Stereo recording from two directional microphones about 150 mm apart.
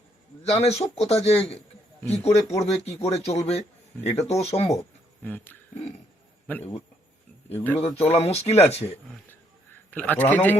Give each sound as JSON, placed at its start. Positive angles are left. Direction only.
{"t": 0.4, "sound": "a man's voice", "side_deg": 45}
{"t": 5.2, "sound": "a man's voice", "side_deg": 10}
{"t": 7.5, "sound": "a man's voice", "side_deg": 10}
{"t": 7.8, "sound": "a man's voice", "side_deg": 45}
{"t": 9.9, "sound": "a man's voice", "side_deg": 10}